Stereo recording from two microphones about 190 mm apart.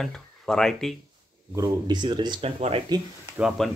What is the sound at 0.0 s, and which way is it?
Speech, centre (ahead or behind).